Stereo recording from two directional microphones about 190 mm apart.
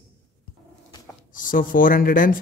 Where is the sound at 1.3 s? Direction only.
45° left (ahead or behind).